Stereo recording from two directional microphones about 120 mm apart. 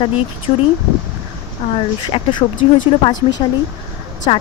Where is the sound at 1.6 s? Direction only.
55° left (ahead or behind).